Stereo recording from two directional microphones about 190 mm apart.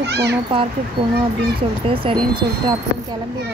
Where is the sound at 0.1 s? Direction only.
60° right (ahead or behind).